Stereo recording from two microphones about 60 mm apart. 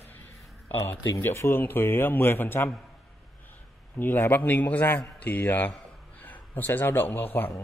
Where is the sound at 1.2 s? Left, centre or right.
Left.